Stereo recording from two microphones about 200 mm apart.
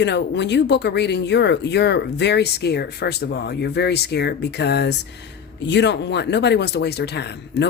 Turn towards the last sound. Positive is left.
turn(degrees=55)  # may be behind; listen again after turning